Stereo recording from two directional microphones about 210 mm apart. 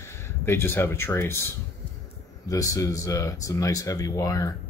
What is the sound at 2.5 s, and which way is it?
Speech, 15° left (ahead or behind).